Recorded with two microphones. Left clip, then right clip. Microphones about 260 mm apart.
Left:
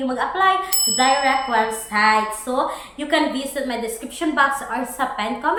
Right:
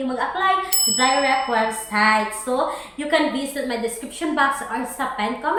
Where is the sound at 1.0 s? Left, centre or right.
Right.